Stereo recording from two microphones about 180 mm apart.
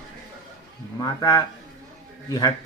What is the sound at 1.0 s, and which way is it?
Speech, 20° left (ahead or behind).